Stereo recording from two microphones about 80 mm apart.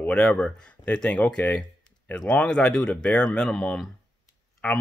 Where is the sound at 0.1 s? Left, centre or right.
Centre.